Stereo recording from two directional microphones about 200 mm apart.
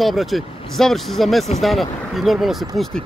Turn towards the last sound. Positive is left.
turn(degrees=0)  # may be behind; listen again after turning